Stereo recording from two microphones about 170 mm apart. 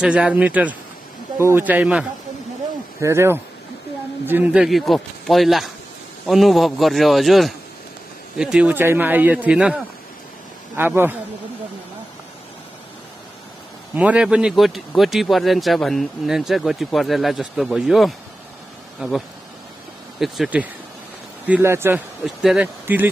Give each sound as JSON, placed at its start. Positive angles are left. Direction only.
{"t": 0.0, "sound": "speech", "side_deg": -5}
{"t": 10.8, "sound": "speech", "side_deg": -10}
{"t": 13.9, "sound": "speech", "side_deg": -5}
{"t": 22.2, "sound": "speech", "side_deg": 0}